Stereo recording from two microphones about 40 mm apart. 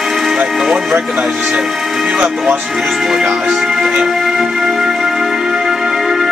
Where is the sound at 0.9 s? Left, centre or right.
Right.